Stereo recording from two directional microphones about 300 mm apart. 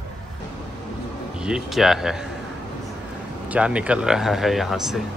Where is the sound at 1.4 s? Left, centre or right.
Centre.